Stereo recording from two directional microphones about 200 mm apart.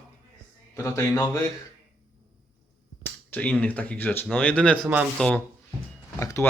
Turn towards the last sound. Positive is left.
turn(degrees=15)  # may be behind; listen again after turning